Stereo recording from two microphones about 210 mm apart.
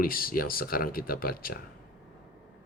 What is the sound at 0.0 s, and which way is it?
Speech, 45° left (ahead or behind).